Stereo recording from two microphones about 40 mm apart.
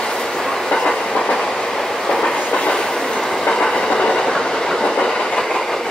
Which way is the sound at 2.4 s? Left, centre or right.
Left.